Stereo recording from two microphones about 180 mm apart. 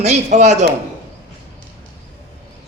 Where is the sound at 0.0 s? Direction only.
40° right (ahead or behind).